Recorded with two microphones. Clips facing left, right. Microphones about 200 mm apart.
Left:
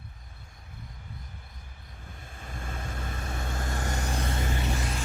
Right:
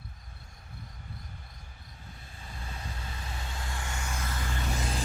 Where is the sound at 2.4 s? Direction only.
50° left (ahead or behind); by 4.6 s 20° left (ahead or behind).